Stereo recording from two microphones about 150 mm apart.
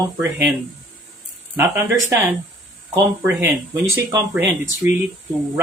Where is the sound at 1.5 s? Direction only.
15° right (ahead or behind).